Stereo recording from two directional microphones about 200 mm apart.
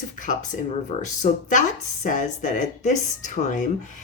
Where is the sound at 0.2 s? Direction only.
40° left (ahead or behind).